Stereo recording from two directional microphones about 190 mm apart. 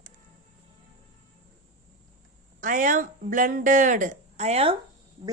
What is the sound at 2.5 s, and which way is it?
Speech, 45° right (ahead or behind).